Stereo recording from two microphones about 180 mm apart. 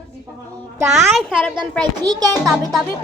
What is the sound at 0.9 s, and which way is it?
Speech, centre (ahead or behind).